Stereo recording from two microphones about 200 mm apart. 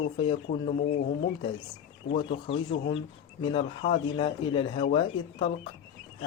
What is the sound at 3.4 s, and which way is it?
A man's voice, 25° left (ahead or behind).